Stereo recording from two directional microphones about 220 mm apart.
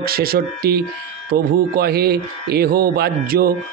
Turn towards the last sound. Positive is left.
turn(degrees=-45)  # may be behind; listen again after turning